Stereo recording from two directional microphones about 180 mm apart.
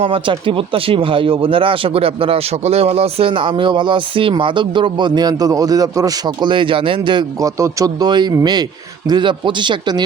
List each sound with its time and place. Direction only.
0.0 s speech: 30° right (ahead or behind)